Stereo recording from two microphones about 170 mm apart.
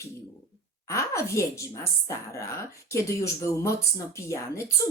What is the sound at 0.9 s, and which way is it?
Speech, 15° left (ahead or behind).